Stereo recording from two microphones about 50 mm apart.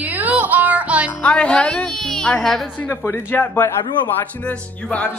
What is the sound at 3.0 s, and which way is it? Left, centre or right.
Speech, left.